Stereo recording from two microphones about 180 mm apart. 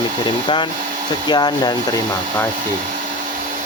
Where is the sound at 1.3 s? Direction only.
25° left (ahead or behind).